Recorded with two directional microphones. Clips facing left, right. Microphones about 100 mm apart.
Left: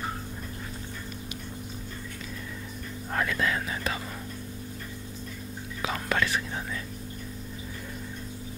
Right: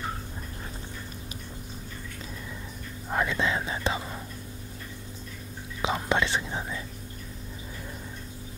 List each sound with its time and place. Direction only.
3.1 s speech: 15° right (ahead or behind)
5.8 s speech: 20° right (ahead or behind)